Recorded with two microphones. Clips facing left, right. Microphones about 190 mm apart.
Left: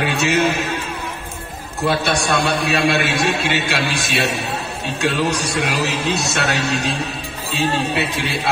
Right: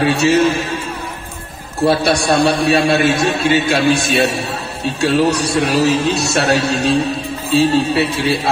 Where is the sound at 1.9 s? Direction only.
35° right (ahead or behind).